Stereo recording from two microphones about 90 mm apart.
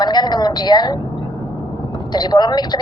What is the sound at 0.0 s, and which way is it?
Music, 50° left (ahead or behind).